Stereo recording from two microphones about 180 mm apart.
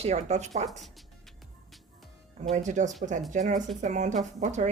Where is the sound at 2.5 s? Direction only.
40° right (ahead or behind).